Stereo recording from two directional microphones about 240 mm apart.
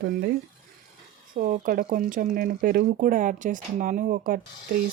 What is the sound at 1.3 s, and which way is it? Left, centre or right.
Speech, right.